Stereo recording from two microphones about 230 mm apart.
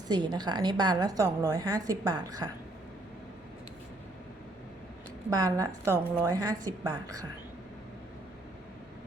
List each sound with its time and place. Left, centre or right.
0.1 s a woman's voice: centre
5.3 s a woman's voice: centre